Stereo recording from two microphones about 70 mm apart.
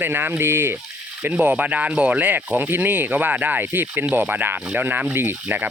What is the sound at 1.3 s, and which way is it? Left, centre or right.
Speech, right.